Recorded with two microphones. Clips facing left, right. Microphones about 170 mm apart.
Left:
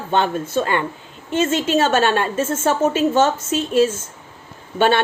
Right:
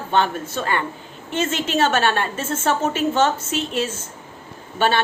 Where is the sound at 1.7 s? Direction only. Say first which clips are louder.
Left 1 dB; 45° left (ahead or behind).